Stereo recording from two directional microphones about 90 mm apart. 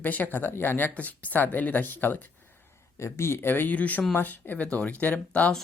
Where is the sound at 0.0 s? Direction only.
20° left (ahead or behind).